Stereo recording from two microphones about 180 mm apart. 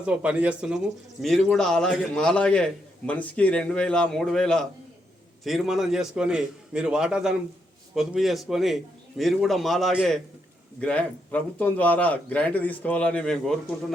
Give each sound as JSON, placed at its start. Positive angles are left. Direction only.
{"t": 0.0, "sound": "a man's voice", "side_deg": -5}